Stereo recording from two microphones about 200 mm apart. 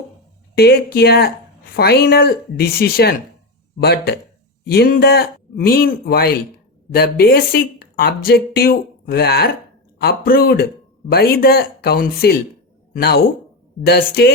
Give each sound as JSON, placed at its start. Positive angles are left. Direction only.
{"t": 0.5, "sound": "speech", "side_deg": 50}